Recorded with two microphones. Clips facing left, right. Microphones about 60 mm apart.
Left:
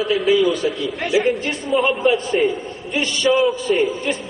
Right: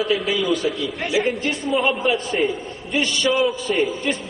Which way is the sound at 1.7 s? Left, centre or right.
Centre.